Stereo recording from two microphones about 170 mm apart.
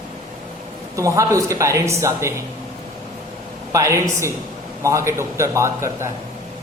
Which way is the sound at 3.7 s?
20° right (ahead or behind).